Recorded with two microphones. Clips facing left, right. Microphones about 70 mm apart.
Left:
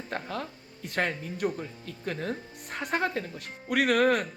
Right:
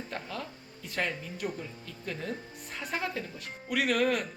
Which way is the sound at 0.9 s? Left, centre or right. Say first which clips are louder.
Left 4 dB; left.